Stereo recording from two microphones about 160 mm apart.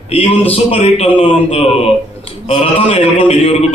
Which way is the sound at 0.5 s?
40° left (ahead or behind).